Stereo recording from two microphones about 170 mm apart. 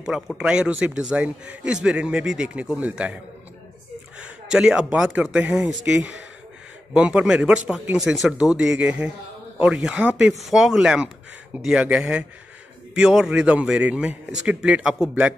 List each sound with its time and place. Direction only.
0.0 s a man's voice: 5° right (ahead or behind)
4.5 s a man's voice: 5° right (ahead or behind)